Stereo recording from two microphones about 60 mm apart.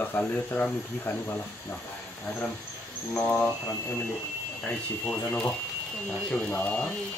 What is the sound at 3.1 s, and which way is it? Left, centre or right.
Speech, left.